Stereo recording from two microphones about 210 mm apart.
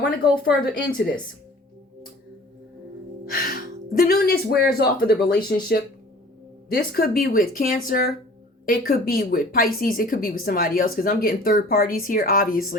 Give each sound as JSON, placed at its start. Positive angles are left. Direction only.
{"t": 0.0, "sound": "a woman's voice", "side_deg": 45}
{"t": 3.3, "sound": "speech", "side_deg": 45}
{"t": 6.7, "sound": "a woman's voice", "side_deg": 45}